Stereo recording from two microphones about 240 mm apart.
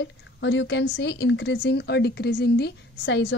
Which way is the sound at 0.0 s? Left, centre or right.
Left.